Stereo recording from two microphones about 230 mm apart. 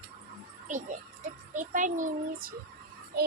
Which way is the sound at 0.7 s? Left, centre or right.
Right.